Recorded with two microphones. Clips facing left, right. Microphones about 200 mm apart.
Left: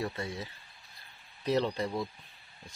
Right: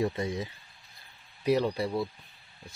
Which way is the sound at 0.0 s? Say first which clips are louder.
Right 6 dB; 20° right (ahead or behind).